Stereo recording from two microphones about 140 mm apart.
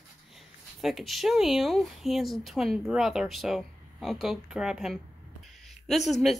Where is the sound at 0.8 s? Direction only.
Centre (ahead or behind).